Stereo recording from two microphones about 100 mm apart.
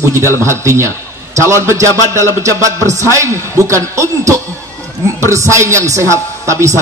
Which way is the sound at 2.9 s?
30° right (ahead or behind).